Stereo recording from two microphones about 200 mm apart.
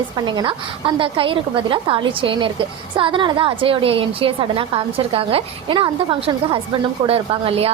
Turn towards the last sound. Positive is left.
turn(degrees=-30)  # may be behind; listen again after turning